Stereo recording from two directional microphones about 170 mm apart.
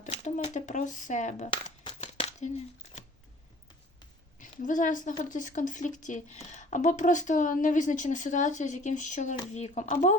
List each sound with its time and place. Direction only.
0.0 s speech: 45° left (ahead or behind)
1.8 s crumpling: 30° left (ahead or behind)
4.6 s speech: 50° left (ahead or behind)